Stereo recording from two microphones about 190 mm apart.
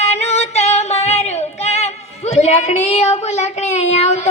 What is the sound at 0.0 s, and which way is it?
Female singing, 35° left (ahead or behind).